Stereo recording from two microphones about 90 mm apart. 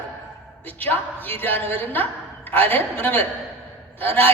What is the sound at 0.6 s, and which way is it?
A woman's voice, 20° left (ahead or behind).